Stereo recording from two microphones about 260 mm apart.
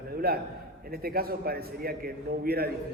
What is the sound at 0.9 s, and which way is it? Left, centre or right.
Speech, right.